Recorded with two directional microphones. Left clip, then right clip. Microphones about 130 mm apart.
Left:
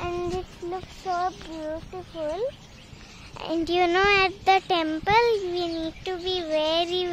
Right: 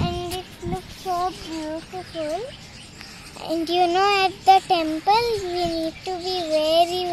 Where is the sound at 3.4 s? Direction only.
10° left (ahead or behind).